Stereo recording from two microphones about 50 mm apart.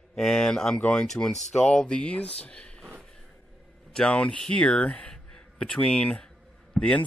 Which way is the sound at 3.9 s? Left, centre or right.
Centre.